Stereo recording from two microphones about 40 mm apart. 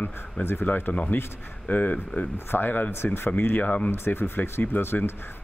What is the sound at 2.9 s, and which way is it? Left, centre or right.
Speech, left.